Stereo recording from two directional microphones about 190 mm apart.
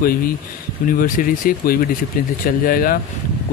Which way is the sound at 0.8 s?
45° left (ahead or behind).